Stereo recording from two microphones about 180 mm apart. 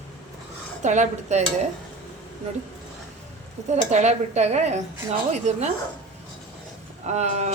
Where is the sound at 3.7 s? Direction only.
40° right (ahead or behind).